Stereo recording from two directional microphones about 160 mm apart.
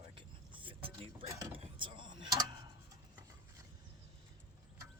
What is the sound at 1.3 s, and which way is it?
Speech, 20° right (ahead or behind).